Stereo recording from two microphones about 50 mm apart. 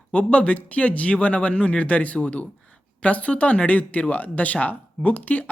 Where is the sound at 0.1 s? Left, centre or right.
Left.